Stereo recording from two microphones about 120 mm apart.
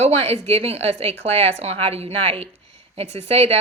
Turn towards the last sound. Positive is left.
turn(degrees=-60)  # may be behind; listen again after turning